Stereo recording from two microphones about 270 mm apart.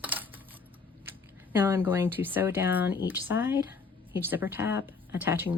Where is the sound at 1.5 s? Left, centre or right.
Centre.